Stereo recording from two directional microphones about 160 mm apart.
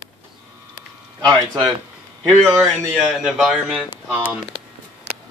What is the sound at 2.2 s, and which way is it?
Speech, centre (ahead or behind).